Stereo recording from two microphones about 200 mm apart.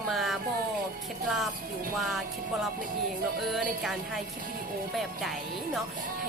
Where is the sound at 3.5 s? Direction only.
Centre (ahead or behind).